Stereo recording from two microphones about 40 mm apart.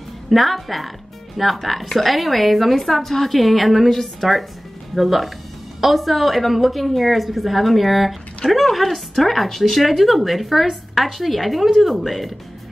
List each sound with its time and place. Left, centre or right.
0.3 s speech: centre